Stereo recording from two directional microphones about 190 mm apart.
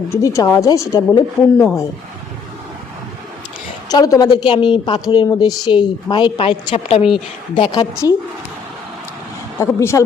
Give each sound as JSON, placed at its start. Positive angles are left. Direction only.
{"t": 0.1, "sound": "a woman's voice", "side_deg": 15}
{"t": 3.8, "sound": "speech", "side_deg": 20}
{"t": 9.6, "sound": "a woman's voice", "side_deg": 15}